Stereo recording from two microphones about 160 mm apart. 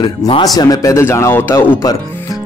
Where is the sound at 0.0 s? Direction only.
25° left (ahead or behind).